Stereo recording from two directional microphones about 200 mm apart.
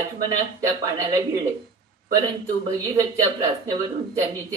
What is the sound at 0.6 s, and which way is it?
Speech, 15° right (ahead or behind).